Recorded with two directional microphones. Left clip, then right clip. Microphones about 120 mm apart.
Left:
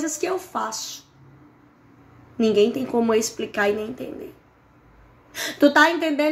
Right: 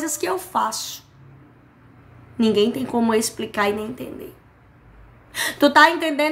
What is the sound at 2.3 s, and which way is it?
A woman's voice, 20° right (ahead or behind).